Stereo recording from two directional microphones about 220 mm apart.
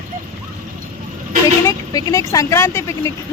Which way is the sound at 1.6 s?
15° left (ahead or behind).